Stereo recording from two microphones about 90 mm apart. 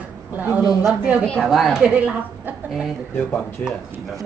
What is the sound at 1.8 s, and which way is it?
Speech, 15° right (ahead or behind).